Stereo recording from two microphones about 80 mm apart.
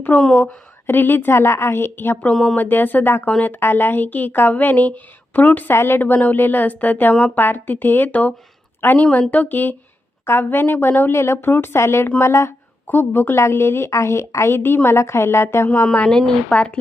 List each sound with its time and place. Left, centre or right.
0.3 s a woman's voice: left
2.3 s speech: centre
2.6 s a woman's voice: left
7.1 s speech: centre
7.3 s a woman's voice: left
15.9 s speech: centre